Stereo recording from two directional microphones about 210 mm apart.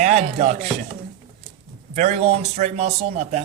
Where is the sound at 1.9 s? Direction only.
30° right (ahead or behind).